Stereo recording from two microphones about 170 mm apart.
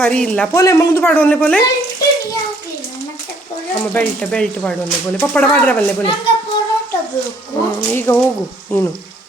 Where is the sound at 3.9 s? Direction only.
5° left (ahead or behind).